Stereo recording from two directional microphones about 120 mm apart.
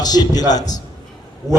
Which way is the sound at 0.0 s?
35° left (ahead or behind).